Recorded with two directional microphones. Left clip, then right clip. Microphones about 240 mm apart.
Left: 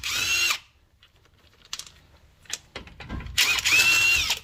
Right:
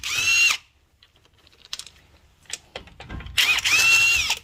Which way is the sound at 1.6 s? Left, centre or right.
Right.